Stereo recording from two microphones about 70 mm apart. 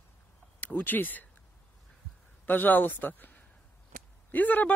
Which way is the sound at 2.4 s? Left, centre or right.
Left.